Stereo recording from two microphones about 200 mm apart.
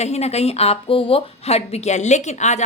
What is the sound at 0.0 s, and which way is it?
A woman's voice, 35° left (ahead or behind).